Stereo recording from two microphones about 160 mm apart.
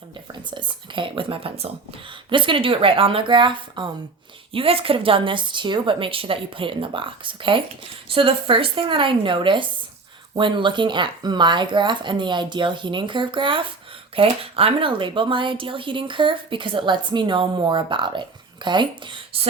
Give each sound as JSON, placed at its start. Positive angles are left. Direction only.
{"t": 0.5, "sound": "speech", "side_deg": -30}